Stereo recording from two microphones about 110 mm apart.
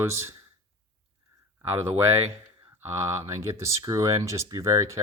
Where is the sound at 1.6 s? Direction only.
25° right (ahead or behind).